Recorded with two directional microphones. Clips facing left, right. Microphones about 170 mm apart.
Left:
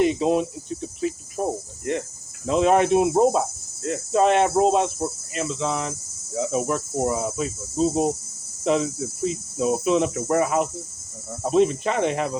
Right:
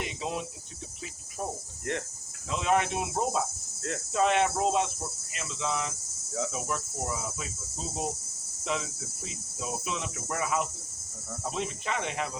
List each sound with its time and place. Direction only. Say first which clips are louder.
0.0 s cricket: left 14 dB; 40° left (ahead or behind)
1.4 s cricket: left 10 dB; 60° left (ahead or behind)
1.8 s cricket: left 7 dB; 10° left (ahead or behind)
2.5 s cricket: left 10 dB; 40° left (ahead or behind)